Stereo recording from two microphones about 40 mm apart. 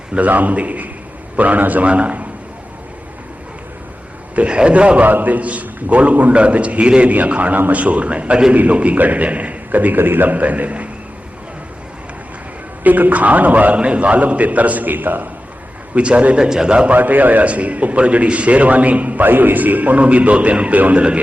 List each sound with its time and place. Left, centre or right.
0.2 s a man's voice: right
4.4 s a man's voice: right
5.0 s a man's voice: right
8.5 s a man's voice: right
10.0 s a man's voice: right
10.2 s a man's voice: right
12.8 s a man's voice: right
16.0 s a man's voice: right
16.9 s a man's voice: right
17.5 s a man's voice: right
19.2 s a man's voice: right